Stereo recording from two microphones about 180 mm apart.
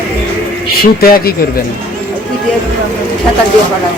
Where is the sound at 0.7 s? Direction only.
55° left (ahead or behind).